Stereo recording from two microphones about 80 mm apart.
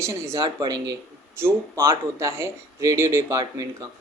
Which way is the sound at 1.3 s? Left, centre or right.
Right.